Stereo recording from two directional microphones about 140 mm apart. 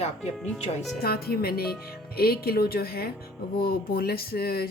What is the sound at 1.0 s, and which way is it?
Speech, 90° left.